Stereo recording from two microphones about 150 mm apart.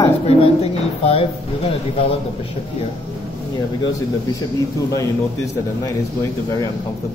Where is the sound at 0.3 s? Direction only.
40° left (ahead or behind).